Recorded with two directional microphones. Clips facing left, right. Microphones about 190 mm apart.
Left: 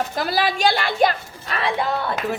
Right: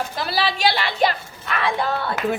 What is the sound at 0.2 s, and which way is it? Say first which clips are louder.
Speech: left 2 dB; 45° left (ahead or behind).